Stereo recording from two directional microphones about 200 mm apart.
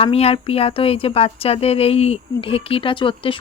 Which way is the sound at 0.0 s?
30° left (ahead or behind).